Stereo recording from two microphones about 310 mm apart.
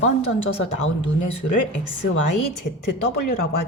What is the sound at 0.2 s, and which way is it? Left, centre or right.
A woman's voice, left.